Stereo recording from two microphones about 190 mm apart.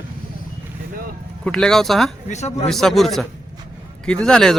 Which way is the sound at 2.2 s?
35° left (ahead or behind).